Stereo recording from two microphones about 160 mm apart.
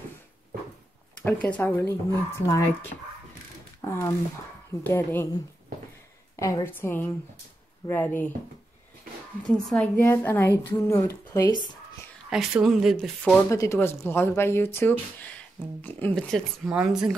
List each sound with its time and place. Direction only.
1.2 s speech: 10° left (ahead or behind)
3.8 s speech: 15° left (ahead or behind)
6.4 s speech: 15° left (ahead or behind)
9.5 s speech: 5° left (ahead or behind); by 11.6 s 25° left (ahead or behind)
12.3 s speech: 5° right (ahead or behind)
13.5 s speech: 20° left (ahead or behind); by 17.1 s 5° right (ahead or behind)